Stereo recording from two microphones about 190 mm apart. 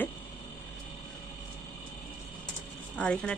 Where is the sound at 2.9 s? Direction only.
5° left (ahead or behind).